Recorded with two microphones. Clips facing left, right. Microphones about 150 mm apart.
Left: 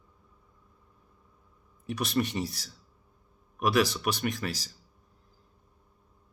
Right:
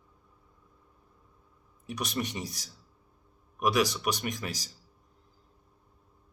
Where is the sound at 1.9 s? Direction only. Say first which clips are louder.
Left 4 dB; 15° right (ahead or behind).